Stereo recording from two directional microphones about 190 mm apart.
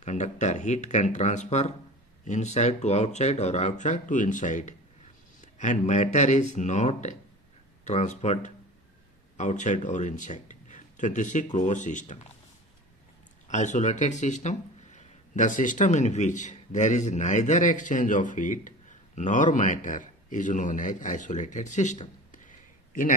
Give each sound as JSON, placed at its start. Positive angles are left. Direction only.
{"t": 0.0, "sound": "a man's voice", "side_deg": 40}
{"t": 13.5, "sound": "speech", "side_deg": 40}